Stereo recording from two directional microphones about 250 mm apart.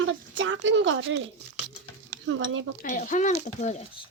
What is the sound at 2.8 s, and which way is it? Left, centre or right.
Speech, left.